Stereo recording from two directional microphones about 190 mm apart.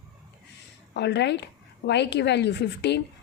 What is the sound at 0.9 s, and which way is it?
A woman's voice, 65° left (ahead or behind).